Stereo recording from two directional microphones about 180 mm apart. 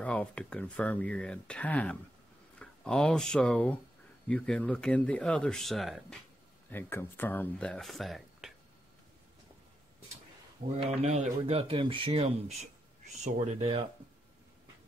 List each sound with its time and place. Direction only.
0.0 s speech: 5° left (ahead or behind)
6.7 s speech: 10° left (ahead or behind)
10.8 s speech: 35° right (ahead or behind)